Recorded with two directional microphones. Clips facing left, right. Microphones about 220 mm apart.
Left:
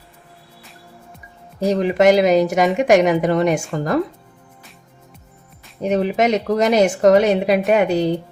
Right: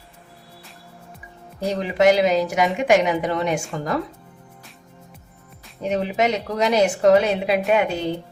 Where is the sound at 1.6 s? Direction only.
45° left (ahead or behind).